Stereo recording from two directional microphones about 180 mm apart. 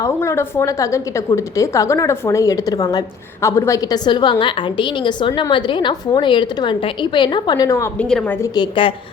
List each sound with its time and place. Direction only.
0.0 s a woman's voice: 15° left (ahead or behind)
7.9 s a woman's voice: 5° left (ahead or behind)
8.5 s a woman's voice: 25° left (ahead or behind)